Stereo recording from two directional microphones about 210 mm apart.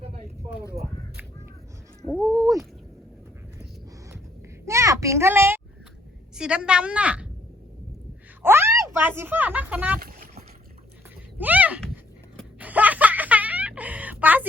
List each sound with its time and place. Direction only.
2.1 s speech: 15° right (ahead or behind)
4.6 s a sound: 15° right (ahead or behind)
6.3 s a woman's voice: 5° right (ahead or behind)
8.4 s speech: 10° right (ahead or behind)
10.0 s boat: 45° right (ahead or behind)
11.3 s speech: 10° right (ahead or behind)
12.5 s snicker: 5° right (ahead or behind)